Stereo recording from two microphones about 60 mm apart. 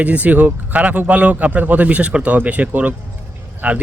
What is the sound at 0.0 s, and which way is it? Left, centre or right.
Speech, right.